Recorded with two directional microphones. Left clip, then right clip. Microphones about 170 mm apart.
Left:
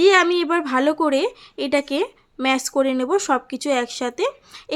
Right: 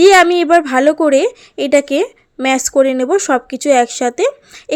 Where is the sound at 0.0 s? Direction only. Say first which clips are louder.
Right 8 dB; 30° right (ahead or behind).